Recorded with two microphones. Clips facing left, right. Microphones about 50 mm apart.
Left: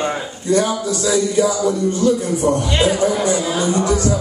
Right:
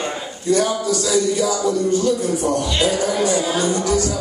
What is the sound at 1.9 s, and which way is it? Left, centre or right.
A man's voice, left.